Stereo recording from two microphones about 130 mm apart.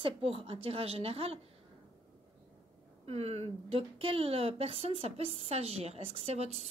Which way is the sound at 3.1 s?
55° right (ahead or behind).